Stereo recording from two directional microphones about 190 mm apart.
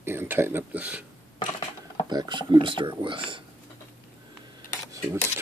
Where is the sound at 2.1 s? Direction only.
25° right (ahead or behind).